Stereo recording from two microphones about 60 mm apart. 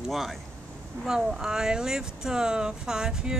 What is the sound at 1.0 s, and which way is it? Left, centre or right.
Speech, centre.